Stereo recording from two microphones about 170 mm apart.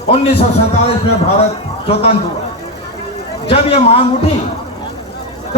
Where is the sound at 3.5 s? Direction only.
35° left (ahead or behind).